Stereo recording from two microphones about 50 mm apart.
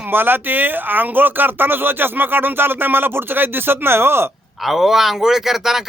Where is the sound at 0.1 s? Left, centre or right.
Right.